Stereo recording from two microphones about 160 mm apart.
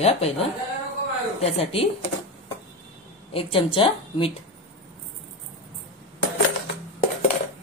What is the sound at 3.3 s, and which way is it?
A woman's voice, 35° left (ahead or behind).